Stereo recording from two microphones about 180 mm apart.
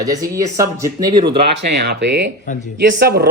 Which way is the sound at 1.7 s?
70° right (ahead or behind).